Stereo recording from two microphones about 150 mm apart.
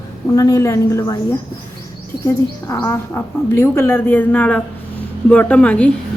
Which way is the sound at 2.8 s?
15° left (ahead or behind).